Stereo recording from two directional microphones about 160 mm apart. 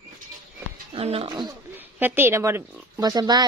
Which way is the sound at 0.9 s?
35° right (ahead or behind).